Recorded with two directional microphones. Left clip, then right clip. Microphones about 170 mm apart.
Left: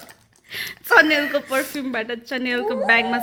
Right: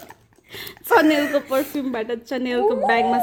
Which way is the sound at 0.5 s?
15° right (ahead or behind).